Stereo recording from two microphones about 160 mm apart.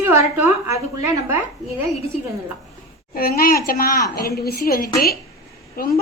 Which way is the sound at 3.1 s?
70° left (ahead or behind).